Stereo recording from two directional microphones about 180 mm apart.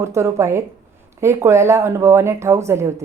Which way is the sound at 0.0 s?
15° right (ahead or behind).